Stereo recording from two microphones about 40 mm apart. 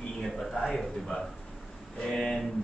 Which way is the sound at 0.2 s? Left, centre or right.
Centre.